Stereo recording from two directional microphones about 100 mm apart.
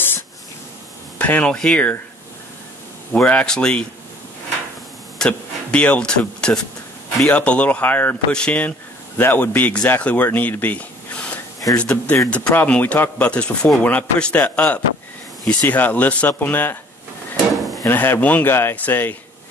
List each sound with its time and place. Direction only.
1.1 s speech: 15° left (ahead or behind)
3.2 s speech: 10° left (ahead or behind)
5.2 s speech: 10° left (ahead or behind)
17.5 s a sound: centre (ahead or behind)
17.8 s speech: 20° left (ahead or behind)